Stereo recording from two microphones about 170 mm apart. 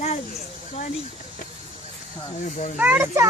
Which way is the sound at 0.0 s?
40° left (ahead or behind).